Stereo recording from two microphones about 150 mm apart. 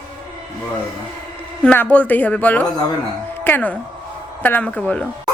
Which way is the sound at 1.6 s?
10° left (ahead or behind).